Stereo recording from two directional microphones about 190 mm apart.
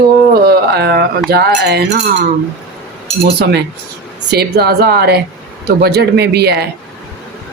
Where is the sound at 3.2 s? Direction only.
60° right (ahead or behind).